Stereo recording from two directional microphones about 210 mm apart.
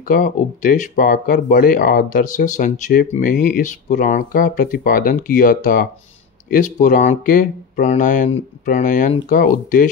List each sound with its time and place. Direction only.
0.1 s speech: 40° left (ahead or behind)